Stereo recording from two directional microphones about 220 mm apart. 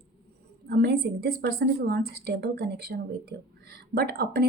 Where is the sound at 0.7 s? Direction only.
50° right (ahead or behind).